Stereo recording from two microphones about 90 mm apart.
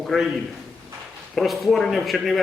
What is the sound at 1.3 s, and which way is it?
A man's voice, centre (ahead or behind).